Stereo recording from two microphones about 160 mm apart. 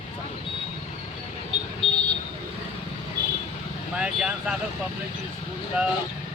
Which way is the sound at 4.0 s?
5° right (ahead or behind).